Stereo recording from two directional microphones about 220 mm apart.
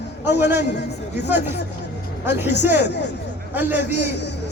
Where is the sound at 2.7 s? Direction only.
50° left (ahead or behind).